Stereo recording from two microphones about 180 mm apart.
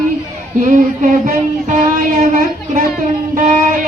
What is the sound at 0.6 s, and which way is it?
Female singing, 45° right (ahead or behind).